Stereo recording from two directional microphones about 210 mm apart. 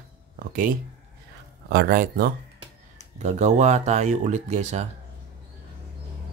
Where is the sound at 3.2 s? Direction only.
35° right (ahead or behind).